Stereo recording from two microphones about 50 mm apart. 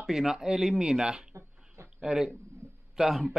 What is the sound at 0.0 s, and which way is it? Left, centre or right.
Speech, centre.